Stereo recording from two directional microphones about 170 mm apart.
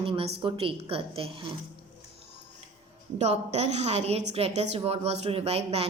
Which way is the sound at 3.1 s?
40° right (ahead or behind).